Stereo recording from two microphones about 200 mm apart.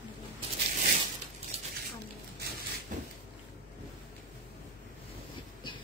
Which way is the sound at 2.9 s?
40° right (ahead or behind).